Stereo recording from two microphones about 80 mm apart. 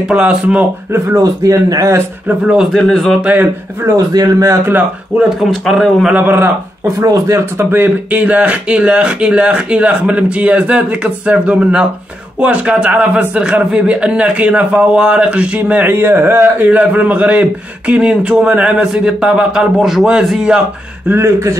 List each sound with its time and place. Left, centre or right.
0.1 s a man's voice: centre
1.0 s speech: right
2.2 s a man's voice: centre
2.7 s speech: centre
3.3 s speech: right
3.9 s speech: right
5.4 s speech: centre
6.1 s a man's voice: right
7.0 s a man's voice: right; by 20.6 s centre
21.1 s speech: right